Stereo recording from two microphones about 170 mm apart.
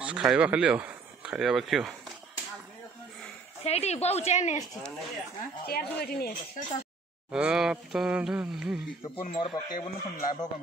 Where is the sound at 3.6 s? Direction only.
40° left (ahead or behind).